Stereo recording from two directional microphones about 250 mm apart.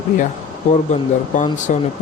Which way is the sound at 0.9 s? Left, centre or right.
Left.